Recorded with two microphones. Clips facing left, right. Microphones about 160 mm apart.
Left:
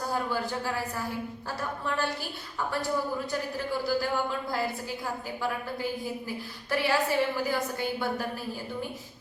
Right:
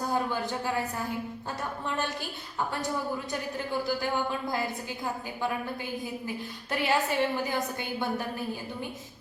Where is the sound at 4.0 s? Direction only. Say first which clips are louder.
Left 1 dB; 20° right (ahead or behind).